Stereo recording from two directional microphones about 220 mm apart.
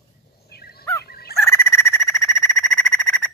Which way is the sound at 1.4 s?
10° left (ahead or behind).